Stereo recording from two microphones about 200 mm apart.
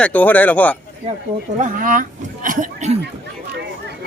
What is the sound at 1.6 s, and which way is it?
Speech, 45° right (ahead or behind).